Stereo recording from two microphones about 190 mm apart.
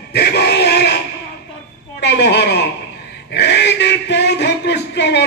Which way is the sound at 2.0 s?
65° left (ahead or behind).